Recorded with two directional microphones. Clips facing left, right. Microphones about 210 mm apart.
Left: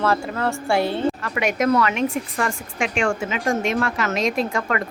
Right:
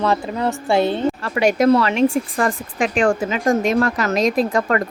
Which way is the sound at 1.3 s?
35° right (ahead or behind).